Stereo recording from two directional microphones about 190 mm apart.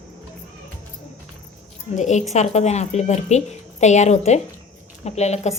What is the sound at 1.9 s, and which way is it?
A woman's voice, 40° left (ahead or behind).